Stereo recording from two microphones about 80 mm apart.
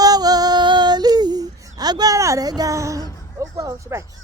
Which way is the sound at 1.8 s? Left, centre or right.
Right.